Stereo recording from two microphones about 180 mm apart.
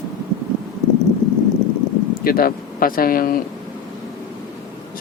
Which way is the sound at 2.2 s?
55° left (ahead or behind).